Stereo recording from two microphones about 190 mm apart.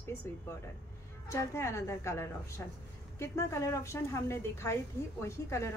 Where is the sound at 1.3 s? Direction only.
15° left (ahead or behind).